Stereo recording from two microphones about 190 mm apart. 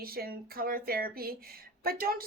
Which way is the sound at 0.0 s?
55° right (ahead or behind).